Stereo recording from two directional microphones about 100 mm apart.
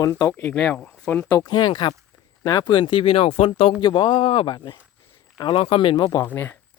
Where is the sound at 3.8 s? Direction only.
55° left (ahead or behind).